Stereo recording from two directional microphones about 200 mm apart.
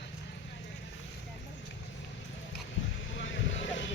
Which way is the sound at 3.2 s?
65° left (ahead or behind).